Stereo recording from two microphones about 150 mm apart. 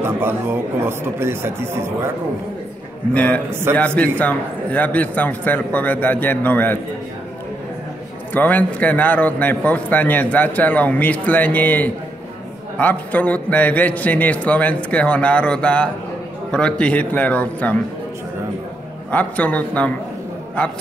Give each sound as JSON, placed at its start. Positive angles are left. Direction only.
{"t": 0.0, "sound": "speech", "side_deg": -15}
{"t": 3.1, "sound": "a man's voice", "side_deg": 10}
{"t": 8.3, "sound": "a man's voice", "side_deg": 10}
{"t": 19.1, "sound": "a man's voice", "side_deg": 10}